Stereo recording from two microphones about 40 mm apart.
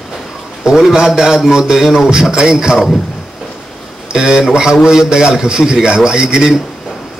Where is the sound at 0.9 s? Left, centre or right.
Centre.